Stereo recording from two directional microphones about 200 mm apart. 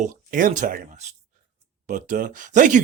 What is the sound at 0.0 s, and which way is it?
Speech, 40° right (ahead or behind).